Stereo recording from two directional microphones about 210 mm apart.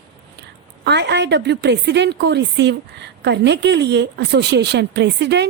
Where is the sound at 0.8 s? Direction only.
55° right (ahead or behind).